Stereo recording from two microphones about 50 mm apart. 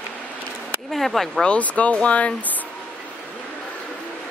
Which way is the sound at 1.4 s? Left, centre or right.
Left.